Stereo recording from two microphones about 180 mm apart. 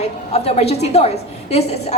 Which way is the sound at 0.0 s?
35° left (ahead or behind).